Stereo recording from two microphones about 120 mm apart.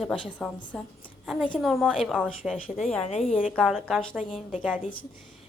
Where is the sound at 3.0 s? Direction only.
60° left (ahead or behind).